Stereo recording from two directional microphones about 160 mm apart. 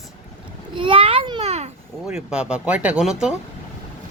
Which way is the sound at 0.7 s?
30° right (ahead or behind).